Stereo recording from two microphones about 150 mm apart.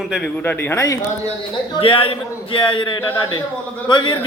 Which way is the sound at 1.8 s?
40° left (ahead or behind).